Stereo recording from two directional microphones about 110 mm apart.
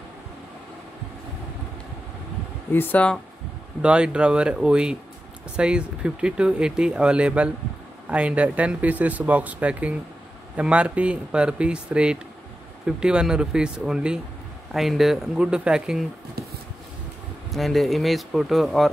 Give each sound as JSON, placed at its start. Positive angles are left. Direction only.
{"t": 2.7, "sound": "speech", "side_deg": 15}
{"t": 3.8, "sound": "speech", "side_deg": -10}
{"t": 17.5, "sound": "speech", "side_deg": 0}